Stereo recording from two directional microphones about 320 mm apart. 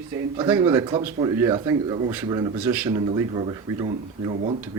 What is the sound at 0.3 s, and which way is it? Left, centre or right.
Speech, centre.